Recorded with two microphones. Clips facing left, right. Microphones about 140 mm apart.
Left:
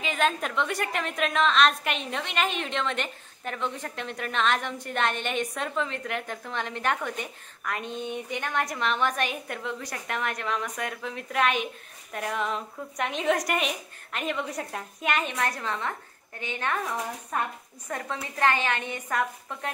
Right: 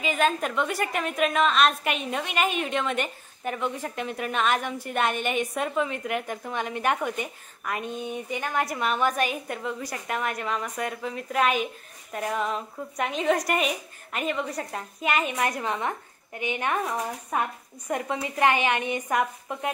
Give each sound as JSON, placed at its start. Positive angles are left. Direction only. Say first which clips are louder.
{"t": 0.0, "sound": "a woman's voice", "louder": "right 2 dB", "side_deg": -5}